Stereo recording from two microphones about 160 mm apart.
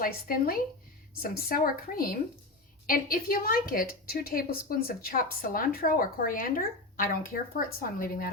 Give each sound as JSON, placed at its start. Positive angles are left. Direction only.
{"t": 0.0, "sound": "a woman's voice", "side_deg": 65}